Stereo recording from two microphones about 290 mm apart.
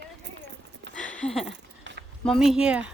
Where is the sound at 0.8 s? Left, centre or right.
Right.